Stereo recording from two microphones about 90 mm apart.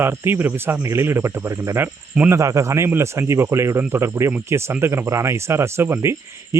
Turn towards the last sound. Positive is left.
turn(degrees=-30)  # may be behind; listen again after turning